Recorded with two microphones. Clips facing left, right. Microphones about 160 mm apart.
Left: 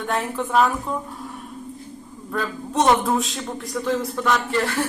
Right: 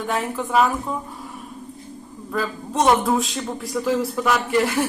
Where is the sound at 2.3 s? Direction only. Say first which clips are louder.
Even; centre (ahead or behind).